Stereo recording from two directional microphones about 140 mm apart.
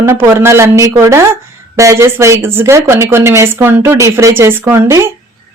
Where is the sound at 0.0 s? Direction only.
15° right (ahead or behind).